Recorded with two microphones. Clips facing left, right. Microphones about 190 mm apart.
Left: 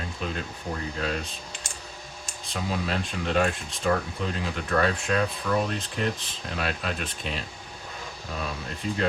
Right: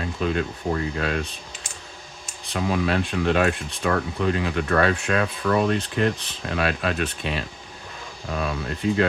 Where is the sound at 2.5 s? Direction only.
70° right (ahead or behind).